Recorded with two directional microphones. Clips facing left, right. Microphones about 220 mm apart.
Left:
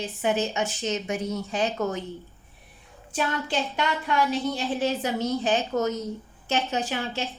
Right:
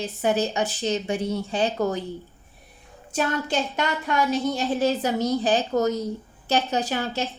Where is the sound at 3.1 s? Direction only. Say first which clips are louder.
Right 3 dB; 45° right (ahead or behind).